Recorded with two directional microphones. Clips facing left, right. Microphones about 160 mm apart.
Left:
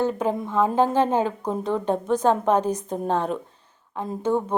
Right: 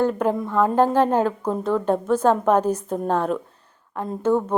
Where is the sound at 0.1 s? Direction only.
5° left (ahead or behind).